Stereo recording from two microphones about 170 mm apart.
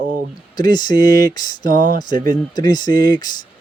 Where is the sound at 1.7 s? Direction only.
50° right (ahead or behind).